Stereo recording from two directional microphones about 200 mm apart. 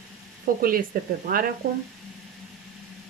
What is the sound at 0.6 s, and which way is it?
Speech, 45° right (ahead or behind).